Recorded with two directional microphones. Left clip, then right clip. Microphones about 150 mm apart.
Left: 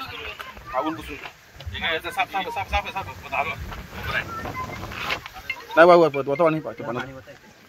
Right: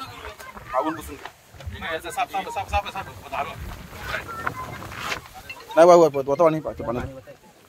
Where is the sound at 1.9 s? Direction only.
90° right.